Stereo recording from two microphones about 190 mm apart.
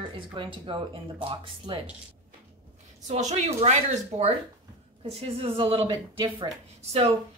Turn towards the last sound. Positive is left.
turn(degrees=-30)  # may be behind; listen again after turning